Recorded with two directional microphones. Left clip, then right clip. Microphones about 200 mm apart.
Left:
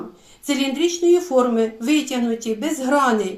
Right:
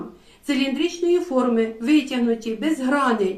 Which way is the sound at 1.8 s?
40° left (ahead or behind).